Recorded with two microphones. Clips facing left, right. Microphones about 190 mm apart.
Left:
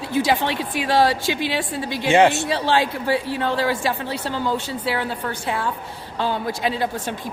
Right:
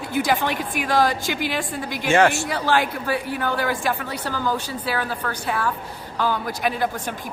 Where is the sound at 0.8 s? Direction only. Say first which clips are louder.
Left 2 dB; 25° left (ahead or behind).